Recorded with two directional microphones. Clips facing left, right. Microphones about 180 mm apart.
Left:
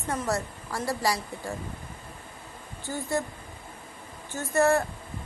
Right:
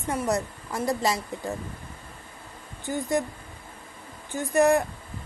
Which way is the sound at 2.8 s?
15° right (ahead or behind).